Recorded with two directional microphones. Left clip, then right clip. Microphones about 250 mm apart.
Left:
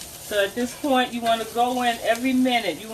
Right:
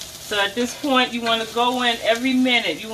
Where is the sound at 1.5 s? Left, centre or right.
Centre.